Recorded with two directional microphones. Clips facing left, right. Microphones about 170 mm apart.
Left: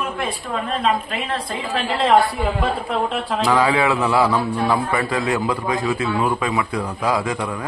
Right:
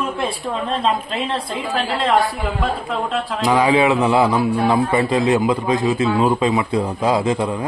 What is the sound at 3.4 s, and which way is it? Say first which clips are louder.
A man's voice: right 3 dB; 15° right (ahead or behind).